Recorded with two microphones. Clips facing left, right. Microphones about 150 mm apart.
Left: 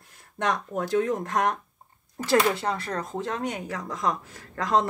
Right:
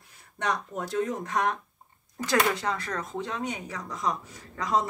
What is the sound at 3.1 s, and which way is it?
Speech, 45° left (ahead or behind).